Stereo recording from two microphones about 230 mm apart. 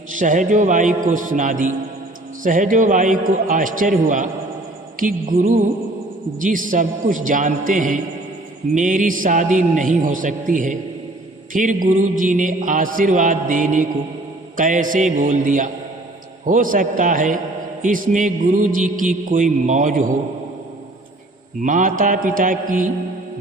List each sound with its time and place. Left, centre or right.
0.1 s music: right
21.6 s music: right